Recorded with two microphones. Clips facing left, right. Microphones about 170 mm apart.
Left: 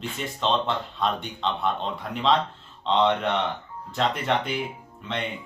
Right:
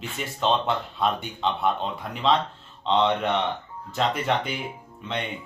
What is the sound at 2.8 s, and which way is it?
Speech, centre (ahead or behind).